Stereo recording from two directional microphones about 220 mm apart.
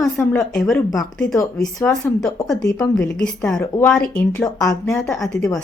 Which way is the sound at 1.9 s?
Centre (ahead or behind).